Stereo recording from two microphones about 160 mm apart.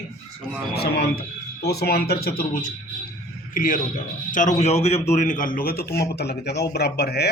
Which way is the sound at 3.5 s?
60° left (ahead or behind).